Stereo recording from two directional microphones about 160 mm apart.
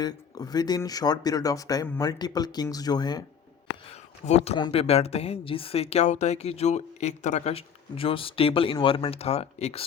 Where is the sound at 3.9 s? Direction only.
40° left (ahead or behind).